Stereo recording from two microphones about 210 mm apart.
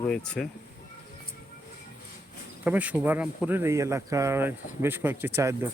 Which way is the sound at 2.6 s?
5° right (ahead or behind).